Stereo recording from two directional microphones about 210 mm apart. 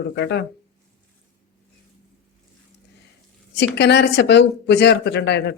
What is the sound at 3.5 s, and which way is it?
Speech, 55° left (ahead or behind).